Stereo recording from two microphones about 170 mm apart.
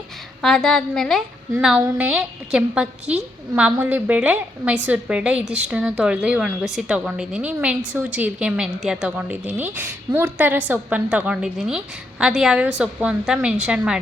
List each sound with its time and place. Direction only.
0.4 s a woman's voice: 5° left (ahead or behind)